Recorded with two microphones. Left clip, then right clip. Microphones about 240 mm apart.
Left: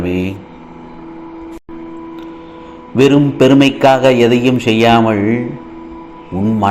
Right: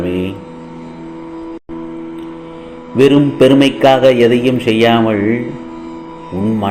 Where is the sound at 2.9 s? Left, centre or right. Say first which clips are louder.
Right 1 dB; centre.